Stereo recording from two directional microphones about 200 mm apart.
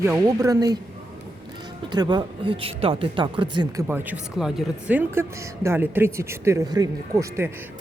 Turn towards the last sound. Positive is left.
turn(degrees=-15)  # may be behind; listen again after turning